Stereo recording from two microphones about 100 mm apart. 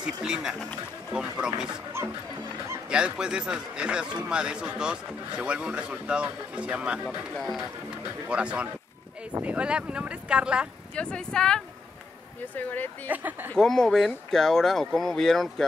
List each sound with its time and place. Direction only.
0.0 s a man's voice: 5° right (ahead or behind)
2.9 s a man's voice: 10° right (ahead or behind)
7.3 s speech: centre (ahead or behind)
8.3 s a man's voice: 10° right (ahead or behind)
11.0 s speech: 10° left (ahead or behind)
12.5 s speech: 15° left (ahead or behind)
13.1 s a man's voice: 20° right (ahead or behind)
13.6 s speech: 5° left (ahead or behind)